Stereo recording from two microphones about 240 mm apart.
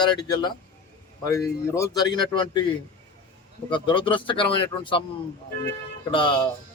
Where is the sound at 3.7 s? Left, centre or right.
Centre.